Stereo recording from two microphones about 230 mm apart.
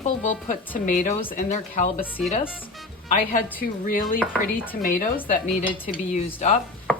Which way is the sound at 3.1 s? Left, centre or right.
Left.